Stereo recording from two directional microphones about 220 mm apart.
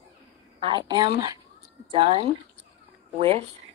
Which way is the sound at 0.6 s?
20° right (ahead or behind).